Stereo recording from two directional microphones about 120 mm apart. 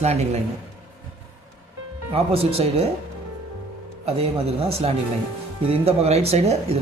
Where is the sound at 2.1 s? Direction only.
55° right (ahead or behind).